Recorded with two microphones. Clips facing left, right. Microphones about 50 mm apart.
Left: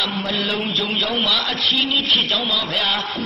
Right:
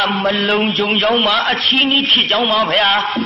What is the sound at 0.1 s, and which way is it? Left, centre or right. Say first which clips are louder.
Speech: right 7 dB; right.